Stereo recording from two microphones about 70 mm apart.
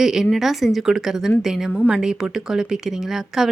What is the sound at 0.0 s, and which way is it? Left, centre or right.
Speech, centre.